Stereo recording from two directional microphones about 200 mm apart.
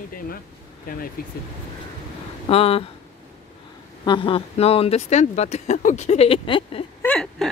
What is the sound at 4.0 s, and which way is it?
Speech, 25° left (ahead or behind).